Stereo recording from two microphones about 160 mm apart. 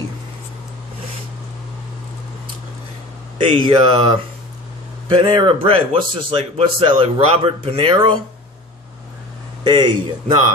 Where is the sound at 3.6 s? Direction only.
30° right (ahead or behind).